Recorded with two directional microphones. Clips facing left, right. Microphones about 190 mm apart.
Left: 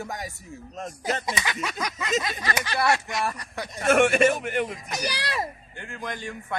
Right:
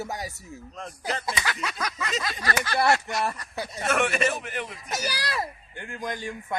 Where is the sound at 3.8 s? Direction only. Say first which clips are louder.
Left 6 dB; 50° left (ahead or behind).